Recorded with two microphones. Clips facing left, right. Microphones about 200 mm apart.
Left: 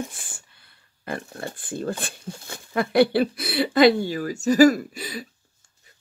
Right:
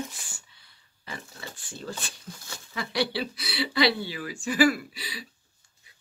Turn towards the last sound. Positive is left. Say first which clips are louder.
# left 8 dB
turn(degrees=50)  # may be behind; listen again after turning